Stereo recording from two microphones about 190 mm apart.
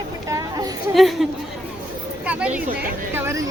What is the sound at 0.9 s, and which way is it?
Speech, centre (ahead or behind).